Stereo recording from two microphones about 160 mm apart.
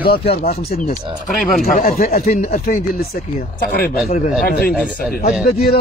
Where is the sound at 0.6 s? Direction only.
65° left (ahead or behind).